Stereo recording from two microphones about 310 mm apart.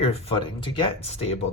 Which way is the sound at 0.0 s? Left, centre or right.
Centre.